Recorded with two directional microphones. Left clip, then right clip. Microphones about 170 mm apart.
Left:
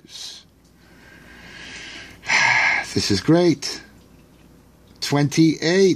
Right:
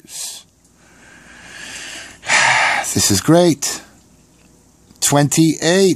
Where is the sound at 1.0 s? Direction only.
30° right (ahead or behind).